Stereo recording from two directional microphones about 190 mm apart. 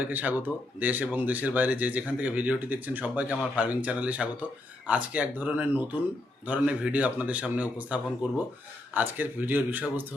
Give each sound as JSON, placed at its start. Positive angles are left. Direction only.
{"t": 0.0, "sound": "speech", "side_deg": -10}
{"t": 9.0, "sound": "speech", "side_deg": -10}